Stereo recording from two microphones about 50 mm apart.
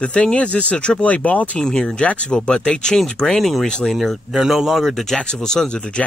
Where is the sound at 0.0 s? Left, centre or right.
Left.